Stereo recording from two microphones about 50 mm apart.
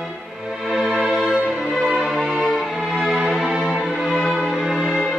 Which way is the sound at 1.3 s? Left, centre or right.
Right.